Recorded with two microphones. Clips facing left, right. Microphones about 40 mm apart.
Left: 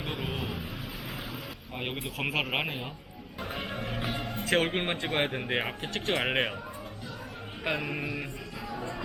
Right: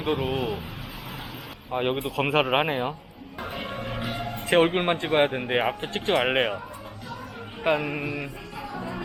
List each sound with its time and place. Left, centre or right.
0.3 s speech: right
1.7 s speech: centre
2.0 s speech: right
3.4 s music: centre
4.4 s music: right
4.7 s speech: centre
5.9 s speech: right
7.6 s speech: centre
8.7 s music: centre